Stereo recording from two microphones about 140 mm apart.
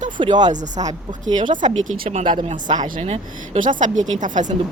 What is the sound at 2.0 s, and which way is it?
Speech, 50° right (ahead or behind).